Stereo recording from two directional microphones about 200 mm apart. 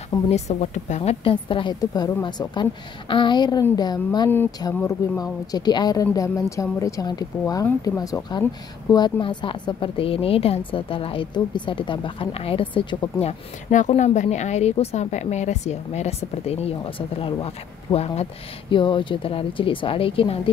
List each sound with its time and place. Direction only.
0.3 s a woman's voice: 35° left (ahead or behind)